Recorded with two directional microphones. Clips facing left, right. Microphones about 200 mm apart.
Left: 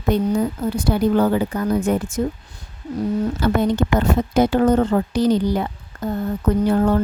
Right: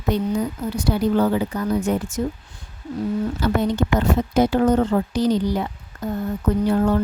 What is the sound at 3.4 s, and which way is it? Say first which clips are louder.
Speech: left 2 dB; 55° left (ahead or behind).